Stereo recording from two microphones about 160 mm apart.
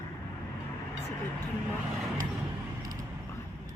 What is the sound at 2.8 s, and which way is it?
Vehicle, 25° right (ahead or behind).